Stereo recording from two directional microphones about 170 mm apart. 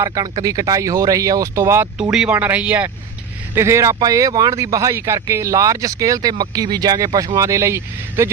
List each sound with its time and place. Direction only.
0.0 s speech: 20° right (ahead or behind)